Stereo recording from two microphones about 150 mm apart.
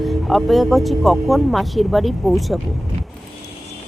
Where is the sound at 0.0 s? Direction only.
Centre (ahead or behind).